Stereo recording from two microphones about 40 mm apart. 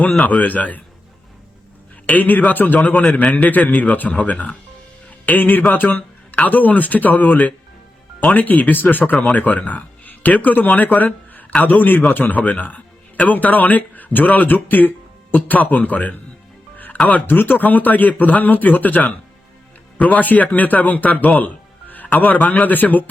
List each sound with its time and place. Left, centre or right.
0.2 s a man's voice: left
0.4 s speech: left
2.0 s speech: left
2.9 s a man's voice: left
3.3 s a man's voice: left
8.7 s speech: left
16.7 s music: left
17.2 s speech: left
21.3 s music: left
22.2 s speech: left